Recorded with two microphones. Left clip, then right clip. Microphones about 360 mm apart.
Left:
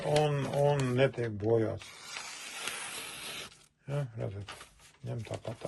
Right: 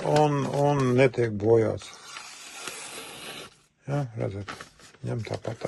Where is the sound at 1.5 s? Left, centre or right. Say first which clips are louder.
Right 7 dB; centre.